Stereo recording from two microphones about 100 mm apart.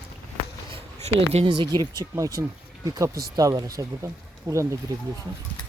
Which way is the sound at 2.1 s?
35° right (ahead or behind).